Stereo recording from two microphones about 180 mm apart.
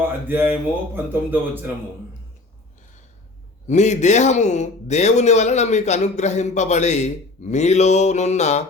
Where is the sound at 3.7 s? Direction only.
40° left (ahead or behind).